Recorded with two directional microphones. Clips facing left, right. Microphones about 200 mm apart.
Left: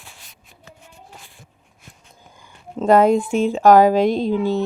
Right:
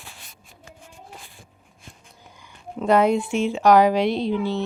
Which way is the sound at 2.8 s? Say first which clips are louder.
Left 4 dB; 45° left (ahead or behind).